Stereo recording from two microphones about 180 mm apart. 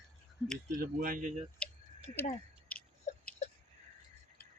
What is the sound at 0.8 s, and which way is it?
Speech, 50° right (ahead or behind).